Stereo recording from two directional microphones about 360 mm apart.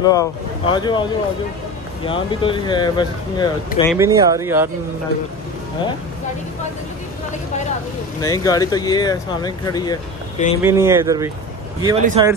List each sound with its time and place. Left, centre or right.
0.0 s speech: centre
2.0 s speech: centre
3.9 s speech: centre
8.2 s speech: centre
10.6 s speech: centre